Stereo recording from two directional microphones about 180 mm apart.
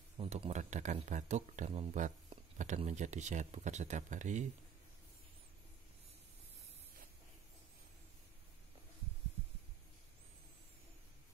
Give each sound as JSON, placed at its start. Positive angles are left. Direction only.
{"t": 0.2, "sound": "speech", "side_deg": -35}